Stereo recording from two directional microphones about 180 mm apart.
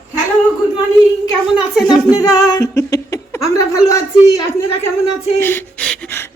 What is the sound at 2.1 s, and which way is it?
Speech, 20° left (ahead or behind).